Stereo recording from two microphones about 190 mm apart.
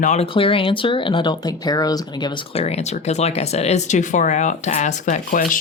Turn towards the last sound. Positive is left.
turn(degrees=45)  # may be behind; listen again after turning